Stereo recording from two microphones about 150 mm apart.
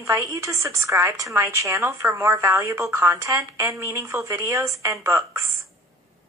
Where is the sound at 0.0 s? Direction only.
20° right (ahead or behind).